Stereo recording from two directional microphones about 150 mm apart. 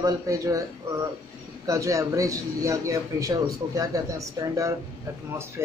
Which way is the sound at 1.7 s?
20° right (ahead or behind).